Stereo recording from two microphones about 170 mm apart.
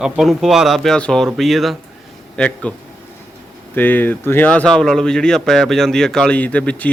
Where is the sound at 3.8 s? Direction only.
10° left (ahead or behind).